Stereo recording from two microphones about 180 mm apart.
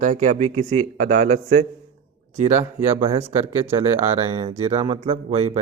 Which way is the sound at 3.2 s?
15° right (ahead or behind).